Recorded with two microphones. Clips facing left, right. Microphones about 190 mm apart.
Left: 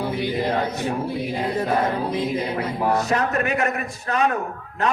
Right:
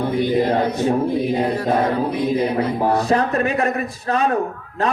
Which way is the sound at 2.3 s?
30° right (ahead or behind).